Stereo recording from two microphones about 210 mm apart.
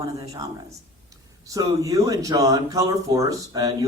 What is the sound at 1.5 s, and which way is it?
A man's voice, 15° right (ahead or behind).